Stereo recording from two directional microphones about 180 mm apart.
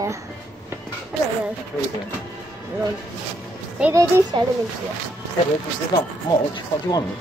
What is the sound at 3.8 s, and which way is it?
Speech, 15° right (ahead or behind).